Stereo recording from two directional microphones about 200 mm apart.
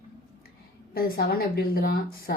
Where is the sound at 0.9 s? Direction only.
50° left (ahead or behind).